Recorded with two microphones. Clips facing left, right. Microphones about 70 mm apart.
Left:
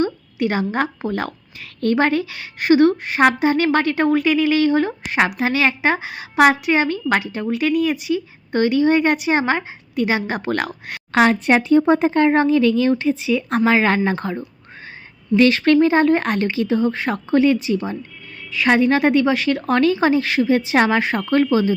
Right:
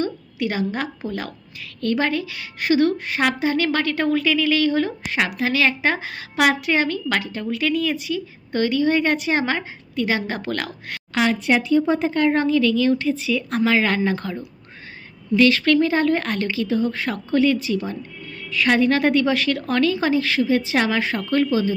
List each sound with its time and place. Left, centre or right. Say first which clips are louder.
0.0 s a sound: left 4 dB; left
1.0 s a woman's voice: left 5 dB; left
11.1 s a woman's voice: left 4 dB; left; by 19.5 s centre
19.5 s a woman's voice: left 3 dB; left